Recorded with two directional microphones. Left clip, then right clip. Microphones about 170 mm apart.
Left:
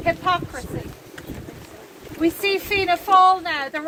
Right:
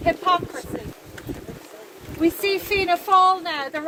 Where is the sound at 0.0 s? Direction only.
45° right (ahead or behind).